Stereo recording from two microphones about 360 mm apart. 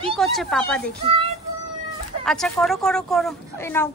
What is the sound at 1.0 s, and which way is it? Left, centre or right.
Speech, centre.